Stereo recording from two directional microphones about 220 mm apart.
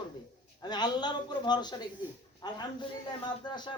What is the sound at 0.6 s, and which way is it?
A man's voice, 20° left (ahead or behind).